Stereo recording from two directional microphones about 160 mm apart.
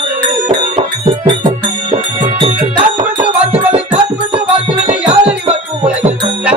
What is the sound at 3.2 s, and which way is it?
Music, 10° right (ahead or behind).